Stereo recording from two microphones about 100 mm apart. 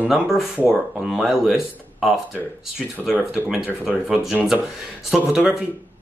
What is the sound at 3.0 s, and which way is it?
Speech, 20° right (ahead or behind).